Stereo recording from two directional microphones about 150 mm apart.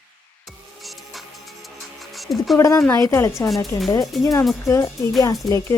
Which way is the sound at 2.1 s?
Centre (ahead or behind).